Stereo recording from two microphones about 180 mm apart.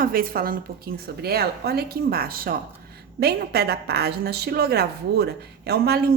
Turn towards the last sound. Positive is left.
turn(degrees=-65)  # may be behind; listen again after turning